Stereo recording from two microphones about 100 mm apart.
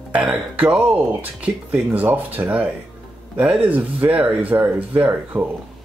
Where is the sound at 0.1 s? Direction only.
10° right (ahead or behind).